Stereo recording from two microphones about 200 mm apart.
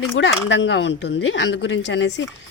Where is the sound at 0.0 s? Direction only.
80° left.